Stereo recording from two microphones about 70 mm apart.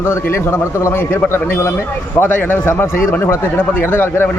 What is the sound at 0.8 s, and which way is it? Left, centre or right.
Speech, left.